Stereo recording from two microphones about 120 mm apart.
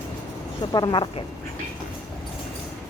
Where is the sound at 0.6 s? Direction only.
35° left (ahead or behind).